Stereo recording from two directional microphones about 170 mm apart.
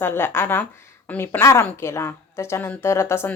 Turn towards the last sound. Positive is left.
turn(degrees=15)  # may be behind; listen again after turning